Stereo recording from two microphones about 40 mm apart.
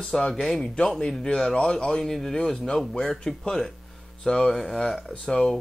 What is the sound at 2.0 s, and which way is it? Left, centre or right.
Speech, centre.